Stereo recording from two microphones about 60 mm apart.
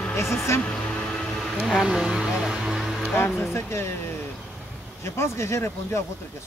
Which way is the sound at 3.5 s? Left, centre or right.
Left.